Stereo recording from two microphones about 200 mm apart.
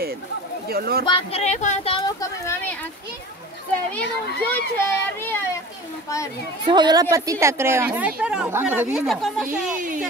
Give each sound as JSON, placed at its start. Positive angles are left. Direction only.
{"t": 0.7, "sound": "speech", "side_deg": -50}
{"t": 1.0, "sound": "speech", "side_deg": 30}
{"t": 2.0, "sound": "speech", "side_deg": 20}
{"t": 4.5, "sound": "speech", "side_deg": 10}
{"t": 6.6, "sound": "a woman's voice", "side_deg": -20}
{"t": 9.8, "sound": "speech", "side_deg": -40}